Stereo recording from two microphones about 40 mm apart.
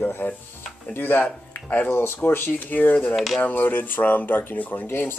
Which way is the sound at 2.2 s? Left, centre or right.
Left.